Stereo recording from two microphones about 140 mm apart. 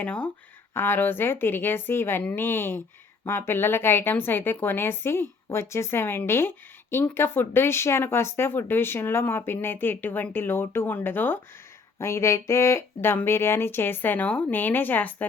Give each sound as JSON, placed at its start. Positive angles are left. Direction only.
{"t": 0.0, "sound": "speech", "side_deg": 10}